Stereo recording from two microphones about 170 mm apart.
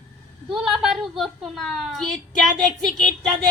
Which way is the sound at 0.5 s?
5° right (ahead or behind).